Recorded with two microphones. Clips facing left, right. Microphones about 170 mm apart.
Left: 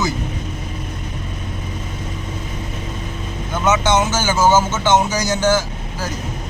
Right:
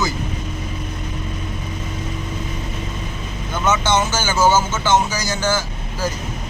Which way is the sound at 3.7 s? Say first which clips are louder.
Left 2 dB; 15° left (ahead or behind).